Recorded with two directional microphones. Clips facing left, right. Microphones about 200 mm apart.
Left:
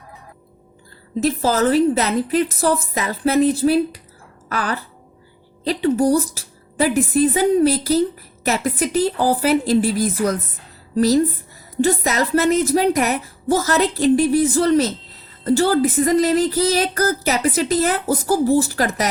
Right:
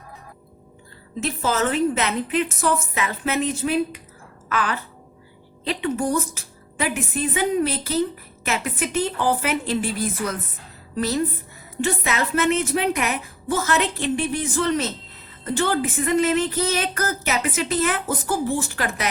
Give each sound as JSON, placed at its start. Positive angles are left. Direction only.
{"t": 1.2, "sound": "a woman's voice", "side_deg": 35}
{"t": 4.4, "sound": "a sound", "side_deg": 40}
{"t": 5.6, "sound": "a woman's voice", "side_deg": 35}